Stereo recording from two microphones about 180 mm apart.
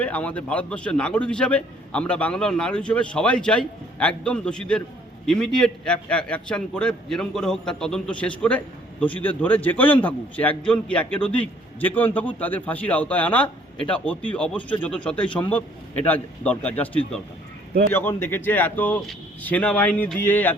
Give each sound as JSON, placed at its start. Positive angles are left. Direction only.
{"t": 0.0, "sound": "a man's voice", "side_deg": 10}